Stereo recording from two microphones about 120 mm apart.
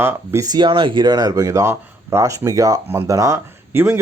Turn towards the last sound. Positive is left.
turn(degrees=-20)  # may be behind; listen again after turning